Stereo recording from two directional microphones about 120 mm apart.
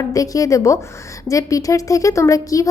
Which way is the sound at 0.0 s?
30° left (ahead or behind).